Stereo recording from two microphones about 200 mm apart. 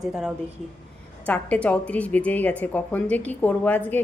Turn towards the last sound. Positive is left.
turn(degrees=10)  # may be behind; listen again after turning